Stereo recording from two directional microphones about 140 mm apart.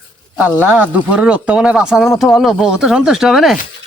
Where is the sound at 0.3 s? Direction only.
10° right (ahead or behind).